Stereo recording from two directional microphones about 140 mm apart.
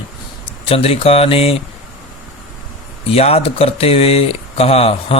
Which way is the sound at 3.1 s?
45° left (ahead or behind).